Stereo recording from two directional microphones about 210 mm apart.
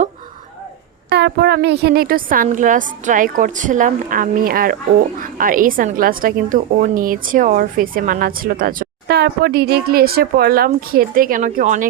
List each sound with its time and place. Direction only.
1.1 s a woman's voice: 50° right (ahead or behind)